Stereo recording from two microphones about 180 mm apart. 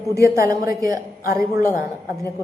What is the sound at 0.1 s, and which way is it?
A man's voice, 15° right (ahead or behind).